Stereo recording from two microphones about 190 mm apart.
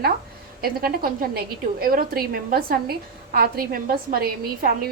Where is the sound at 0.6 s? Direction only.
50° right (ahead or behind).